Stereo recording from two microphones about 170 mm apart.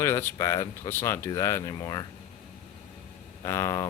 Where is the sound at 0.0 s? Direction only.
15° left (ahead or behind).